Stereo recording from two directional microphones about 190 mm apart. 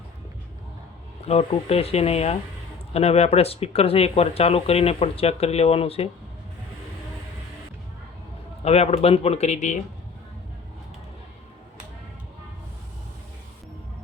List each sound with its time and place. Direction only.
1.2 s speech: 35° left (ahead or behind)
8.6 s speech: 35° left (ahead or behind)